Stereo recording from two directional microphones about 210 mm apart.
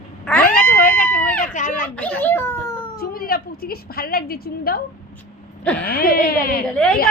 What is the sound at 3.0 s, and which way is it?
A woman's voice, 45° left (ahead or behind).